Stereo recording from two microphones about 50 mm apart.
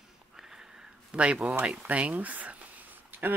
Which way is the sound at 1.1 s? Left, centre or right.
Right.